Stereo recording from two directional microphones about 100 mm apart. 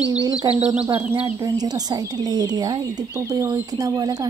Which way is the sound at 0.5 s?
40° right (ahead or behind).